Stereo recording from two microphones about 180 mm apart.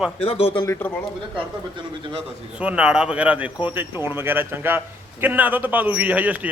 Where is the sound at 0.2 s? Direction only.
30° left (ahead or behind).